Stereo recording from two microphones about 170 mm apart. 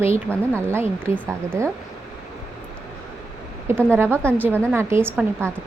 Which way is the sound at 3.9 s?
15° right (ahead or behind).